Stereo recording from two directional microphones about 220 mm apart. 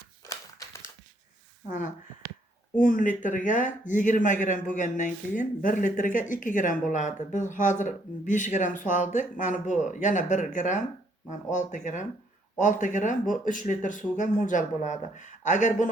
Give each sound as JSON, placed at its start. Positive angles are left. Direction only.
{"t": 2.7, "sound": "speech", "side_deg": 35}